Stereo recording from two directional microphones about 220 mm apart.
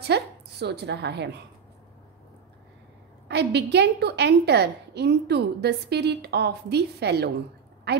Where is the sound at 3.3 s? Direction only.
50° right (ahead or behind).